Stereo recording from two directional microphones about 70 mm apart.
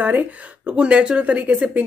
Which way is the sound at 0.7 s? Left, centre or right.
Centre.